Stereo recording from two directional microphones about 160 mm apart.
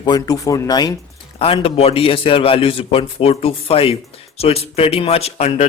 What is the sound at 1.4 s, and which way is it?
Speech, 35° left (ahead or behind).